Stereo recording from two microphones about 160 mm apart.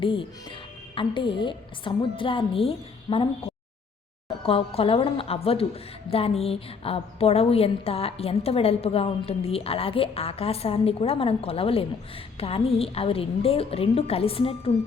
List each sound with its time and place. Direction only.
0.0 s a woman's voice: 30° left (ahead or behind)